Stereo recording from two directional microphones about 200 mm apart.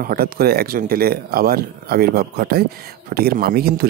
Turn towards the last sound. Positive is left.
turn(degrees=-50)  # may be behind; listen again after turning